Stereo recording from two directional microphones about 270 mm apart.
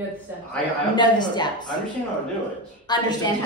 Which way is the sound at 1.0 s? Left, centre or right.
Centre.